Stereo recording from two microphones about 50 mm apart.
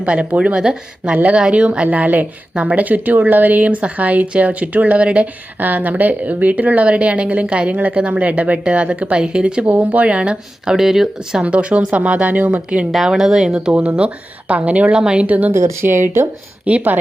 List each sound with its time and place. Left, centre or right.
0.0 s speech: right
1.1 s a woman's voice: right
1.4 s speech: centre
5.5 s a woman's voice: right; by 9.6 s centre
9.6 s speech: right
10.7 s speech: centre
11.4 s speech: right
13.1 s speech: centre
13.7 s speech: right
15.3 s a woman's voice: right
15.8 s speech: right
16.6 s a woman's voice: right